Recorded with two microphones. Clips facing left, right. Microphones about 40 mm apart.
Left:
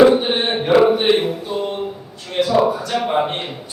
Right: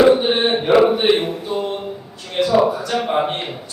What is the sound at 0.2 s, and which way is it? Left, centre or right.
Mantra, centre.